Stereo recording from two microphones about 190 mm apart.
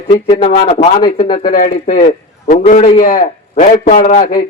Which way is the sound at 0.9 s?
25° left (ahead or behind).